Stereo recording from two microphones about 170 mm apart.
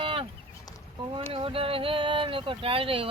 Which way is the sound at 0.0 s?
30° right (ahead or behind).